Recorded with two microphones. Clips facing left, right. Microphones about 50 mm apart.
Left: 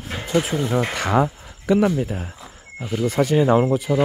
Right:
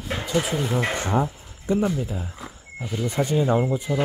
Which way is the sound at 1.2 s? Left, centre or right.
Left.